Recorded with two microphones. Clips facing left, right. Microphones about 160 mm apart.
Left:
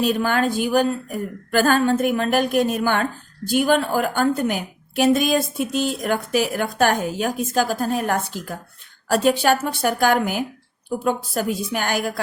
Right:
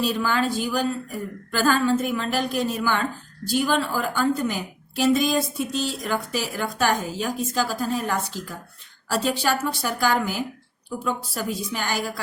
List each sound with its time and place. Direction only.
0.0 s a woman's voice: 55° left (ahead or behind)